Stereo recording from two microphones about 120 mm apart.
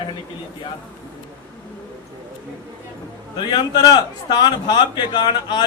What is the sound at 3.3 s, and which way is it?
A man's voice, 35° left (ahead or behind).